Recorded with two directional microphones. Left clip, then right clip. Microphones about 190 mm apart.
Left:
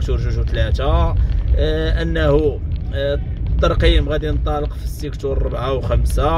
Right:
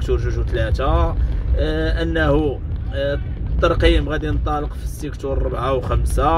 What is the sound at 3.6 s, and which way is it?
Speech, 15° left (ahead or behind).